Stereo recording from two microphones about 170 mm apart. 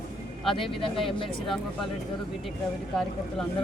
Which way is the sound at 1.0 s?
30° left (ahead or behind).